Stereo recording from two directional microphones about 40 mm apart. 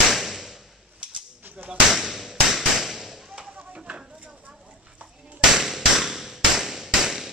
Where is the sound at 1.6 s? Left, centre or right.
Centre.